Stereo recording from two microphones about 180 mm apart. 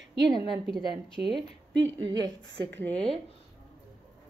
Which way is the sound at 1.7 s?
80° right.